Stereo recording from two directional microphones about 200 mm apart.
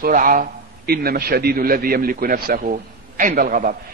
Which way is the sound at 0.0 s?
40° right (ahead or behind).